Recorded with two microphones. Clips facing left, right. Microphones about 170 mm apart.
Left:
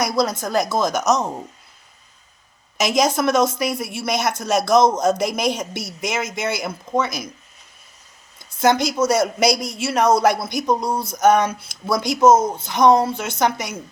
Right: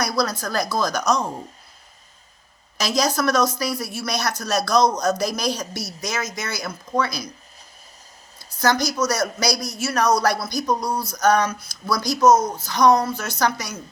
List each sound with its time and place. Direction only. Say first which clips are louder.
0.0 s speech: left 3 dB; 20° left (ahead or behind)
2.7 s speech: left 3 dB; 20° left (ahead or behind)
8.4 s speech: left 3 dB; 25° left (ahead or behind)